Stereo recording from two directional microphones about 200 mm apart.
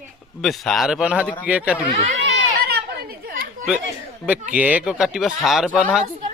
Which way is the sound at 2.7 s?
50° right (ahead or behind).